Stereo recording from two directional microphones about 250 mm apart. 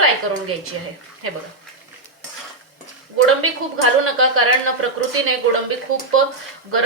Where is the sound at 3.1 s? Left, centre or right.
Right.